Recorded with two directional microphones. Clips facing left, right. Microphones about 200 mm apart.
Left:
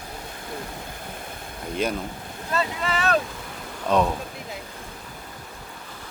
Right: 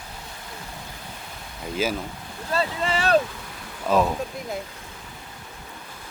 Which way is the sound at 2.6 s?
30° right (ahead or behind).